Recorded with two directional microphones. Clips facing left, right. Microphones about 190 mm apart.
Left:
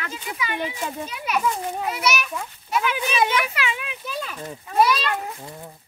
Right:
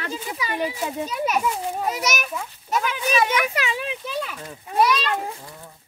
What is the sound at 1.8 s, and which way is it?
Speech, 40° right (ahead or behind).